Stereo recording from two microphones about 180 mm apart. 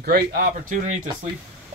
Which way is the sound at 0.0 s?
55° right (ahead or behind).